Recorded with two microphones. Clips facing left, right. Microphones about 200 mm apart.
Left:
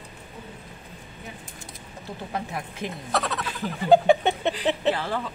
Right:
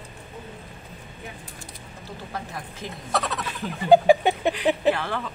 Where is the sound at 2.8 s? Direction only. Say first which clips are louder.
Left 4 dB; 20° left (ahead or behind).